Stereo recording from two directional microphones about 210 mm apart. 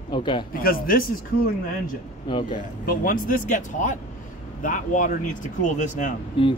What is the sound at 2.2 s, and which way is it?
Speech, 25° left (ahead or behind).